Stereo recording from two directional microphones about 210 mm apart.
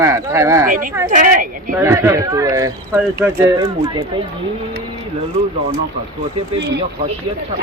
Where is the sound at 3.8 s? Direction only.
25° right (ahead or behind).